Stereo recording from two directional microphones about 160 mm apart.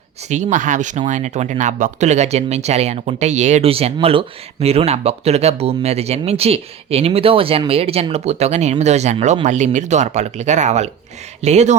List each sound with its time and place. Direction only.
0.3 s speech: 50° right (ahead or behind)